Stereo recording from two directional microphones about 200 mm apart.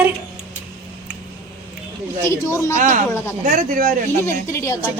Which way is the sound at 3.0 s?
15° left (ahead or behind).